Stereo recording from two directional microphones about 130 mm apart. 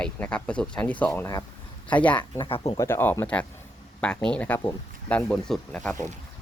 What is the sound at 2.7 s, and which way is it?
Speech, 20° left (ahead or behind).